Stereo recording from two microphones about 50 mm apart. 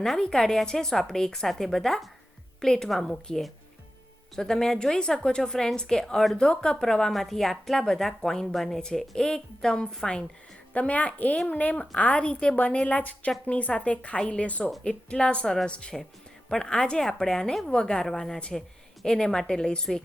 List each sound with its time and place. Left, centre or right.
0.0 s speech: centre
10.8 s speech: left; by 20.0 s centre